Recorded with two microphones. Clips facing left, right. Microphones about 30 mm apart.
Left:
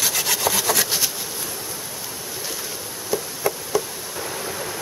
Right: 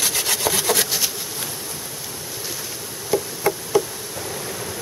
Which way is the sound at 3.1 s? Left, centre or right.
Centre.